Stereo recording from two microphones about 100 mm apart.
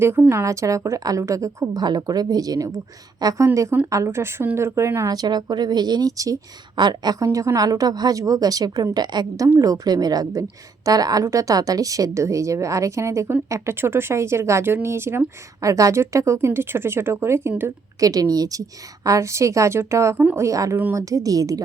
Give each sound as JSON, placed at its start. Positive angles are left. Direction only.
{"t": 0.0, "sound": "a woman's voice", "side_deg": -25}
{"t": 5.1, "sound": "speech", "side_deg": -40}
{"t": 6.7, "sound": "a woman's voice", "side_deg": -45}
{"t": 18.0, "sound": "a woman's voice", "side_deg": -40}